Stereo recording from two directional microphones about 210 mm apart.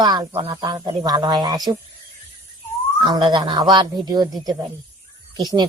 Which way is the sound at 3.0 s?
20° right (ahead or behind).